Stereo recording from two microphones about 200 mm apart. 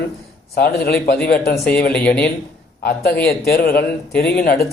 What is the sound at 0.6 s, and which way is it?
A man's voice, 50° left (ahead or behind).